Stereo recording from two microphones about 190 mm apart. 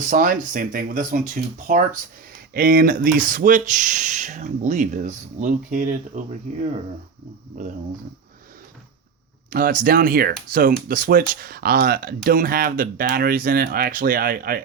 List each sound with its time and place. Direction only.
0.0 s speech: 45° right (ahead or behind)
7.6 s speech: 45° right (ahead or behind)
9.5 s speech: 45° right (ahead or behind)